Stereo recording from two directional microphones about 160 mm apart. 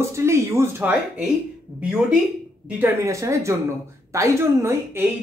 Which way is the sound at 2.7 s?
15° right (ahead or behind).